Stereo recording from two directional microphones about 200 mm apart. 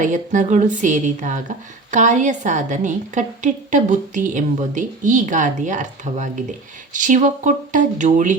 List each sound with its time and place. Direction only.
0.0 s speech: 40° right (ahead or behind)